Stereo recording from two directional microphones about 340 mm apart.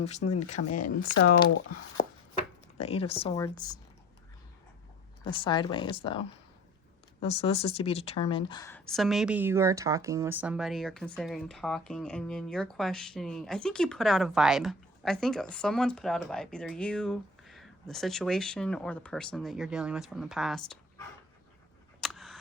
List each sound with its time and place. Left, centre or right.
0.0 s speech: centre
2.7 s speech: centre
5.2 s speech: centre
22.0 s camera: centre